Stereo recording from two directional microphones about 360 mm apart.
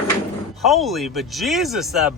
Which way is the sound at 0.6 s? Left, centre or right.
Centre.